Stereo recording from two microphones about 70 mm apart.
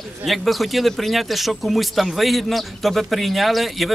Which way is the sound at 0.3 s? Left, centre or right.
Centre.